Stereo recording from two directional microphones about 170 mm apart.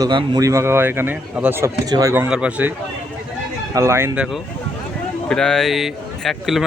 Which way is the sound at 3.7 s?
15° right (ahead or behind).